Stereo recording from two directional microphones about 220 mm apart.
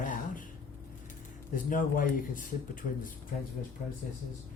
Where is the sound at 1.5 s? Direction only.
40° left (ahead or behind).